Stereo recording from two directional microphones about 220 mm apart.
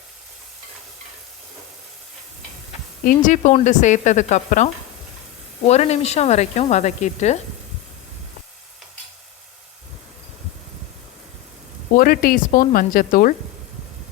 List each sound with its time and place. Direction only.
3.1 s speech: 35° left (ahead or behind)
11.9 s speech: 40° left (ahead or behind)